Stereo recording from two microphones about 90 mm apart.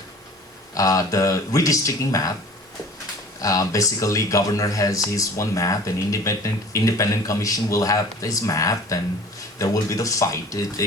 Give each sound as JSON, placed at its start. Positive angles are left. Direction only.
{"t": 0.7, "sound": "speech", "side_deg": 40}
{"t": 3.4, "sound": "speech", "side_deg": 40}